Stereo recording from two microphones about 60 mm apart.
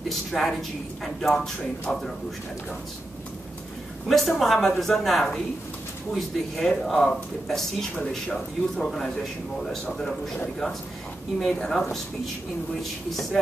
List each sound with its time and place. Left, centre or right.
0.1 s a woman's voice: centre
4.1 s a woman's voice: centre